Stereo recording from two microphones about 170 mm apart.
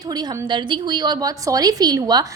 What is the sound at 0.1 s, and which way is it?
A woman's voice, 25° right (ahead or behind).